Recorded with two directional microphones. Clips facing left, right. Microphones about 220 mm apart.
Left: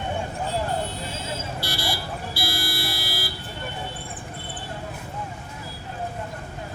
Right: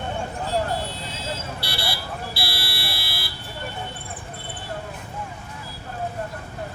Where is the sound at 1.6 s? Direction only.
45° left (ahead or behind).